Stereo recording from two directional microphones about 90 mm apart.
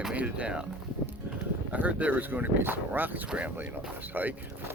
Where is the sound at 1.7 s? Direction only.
15° right (ahead or behind).